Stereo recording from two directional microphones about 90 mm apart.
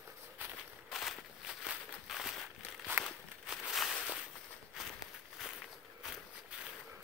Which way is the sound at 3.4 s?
Centre (ahead or behind).